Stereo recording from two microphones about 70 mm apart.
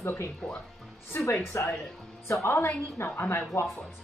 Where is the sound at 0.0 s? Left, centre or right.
Left.